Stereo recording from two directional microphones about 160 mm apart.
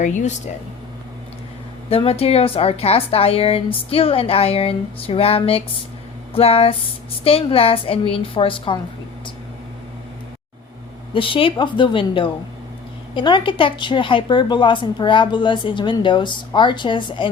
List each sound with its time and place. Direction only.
0.0 s speech: 50° left (ahead or behind)
1.9 s a woman's voice: 35° left (ahead or behind)
11.1 s a woman's voice: 35° left (ahead or behind)